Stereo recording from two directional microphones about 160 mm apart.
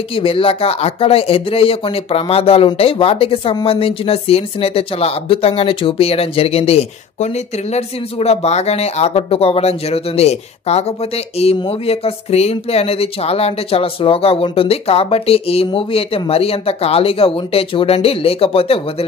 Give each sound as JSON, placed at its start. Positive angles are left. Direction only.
{"t": 0.1, "sound": "speech", "side_deg": 35}